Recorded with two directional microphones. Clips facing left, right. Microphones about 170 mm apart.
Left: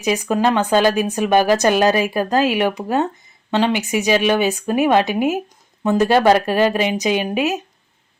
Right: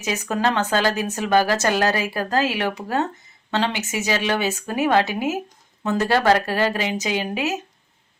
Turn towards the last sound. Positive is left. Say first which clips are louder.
# left 5 dB
turn(degrees=15)  # may be behind; listen again after turning